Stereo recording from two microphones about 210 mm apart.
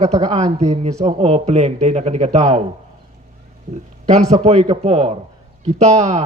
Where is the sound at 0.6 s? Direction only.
30° right (ahead or behind).